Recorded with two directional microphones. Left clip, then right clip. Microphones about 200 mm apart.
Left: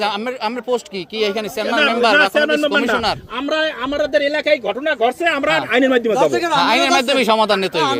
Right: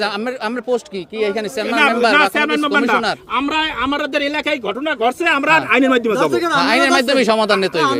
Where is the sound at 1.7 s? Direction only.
10° right (ahead or behind).